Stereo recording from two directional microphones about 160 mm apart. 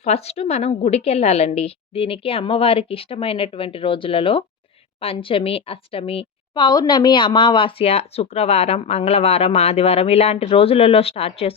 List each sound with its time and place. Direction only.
0.0 s a woman's voice: 40° left (ahead or behind)